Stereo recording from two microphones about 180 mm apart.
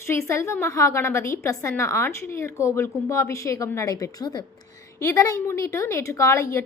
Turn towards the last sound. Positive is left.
turn(degrees=15)  # may be behind; listen again after turning